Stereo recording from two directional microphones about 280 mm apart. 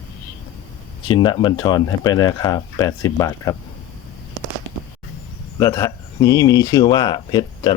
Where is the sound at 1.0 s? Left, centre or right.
Centre.